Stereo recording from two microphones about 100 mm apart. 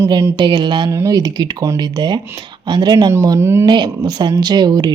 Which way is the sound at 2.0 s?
50° right (ahead or behind).